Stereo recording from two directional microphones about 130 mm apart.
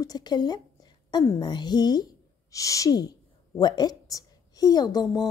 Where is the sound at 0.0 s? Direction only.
30° left (ahead or behind).